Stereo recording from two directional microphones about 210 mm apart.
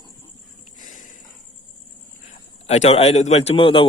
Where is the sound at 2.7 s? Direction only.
30° left (ahead or behind).